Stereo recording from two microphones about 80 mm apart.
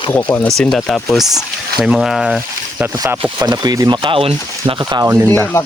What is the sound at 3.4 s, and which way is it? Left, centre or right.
Speech, right.